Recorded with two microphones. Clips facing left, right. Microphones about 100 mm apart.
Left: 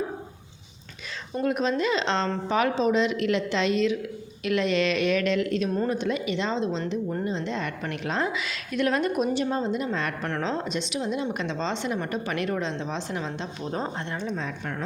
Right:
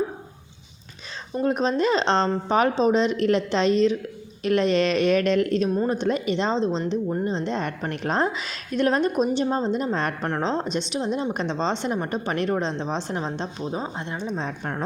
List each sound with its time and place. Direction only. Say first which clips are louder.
1.4 s speech: right 3 dB; 35° right (ahead or behind)
10.4 s speech: right 4 dB; 30° right (ahead or behind)
13.7 s a woman's voice: right 1 dB; 10° right (ahead or behind)
14.4 s speech: right 3 dB; 40° right (ahead or behind)